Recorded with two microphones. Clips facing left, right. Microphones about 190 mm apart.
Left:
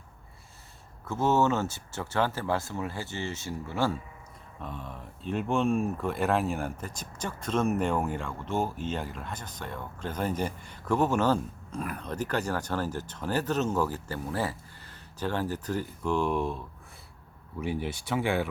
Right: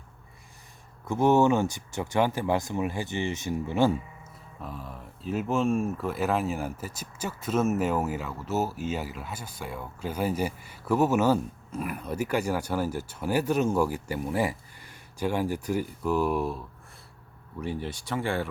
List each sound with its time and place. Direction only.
1.0 s speech: 15° right (ahead or behind)
4.6 s speech: 5° right (ahead or behind)